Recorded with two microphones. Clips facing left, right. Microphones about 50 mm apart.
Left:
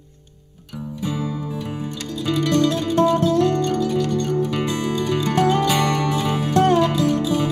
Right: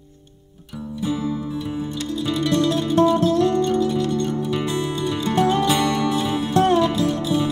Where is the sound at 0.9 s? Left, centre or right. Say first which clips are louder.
Right 2 dB; left.